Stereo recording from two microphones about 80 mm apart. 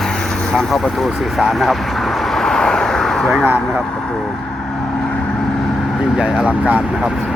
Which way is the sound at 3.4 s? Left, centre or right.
Right.